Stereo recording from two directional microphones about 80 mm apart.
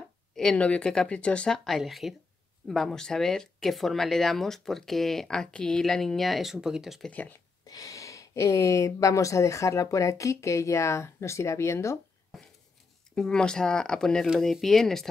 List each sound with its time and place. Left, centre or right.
0.4 s speech: centre
7.1 s speech: left
7.6 s speech: left
13.1 s speech: centre